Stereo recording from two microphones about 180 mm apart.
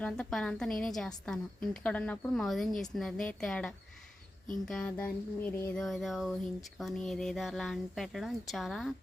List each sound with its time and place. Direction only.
0.0 s a woman's voice: 5° left (ahead or behind)